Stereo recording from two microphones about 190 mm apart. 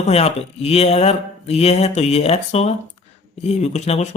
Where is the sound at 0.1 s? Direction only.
30° left (ahead or behind).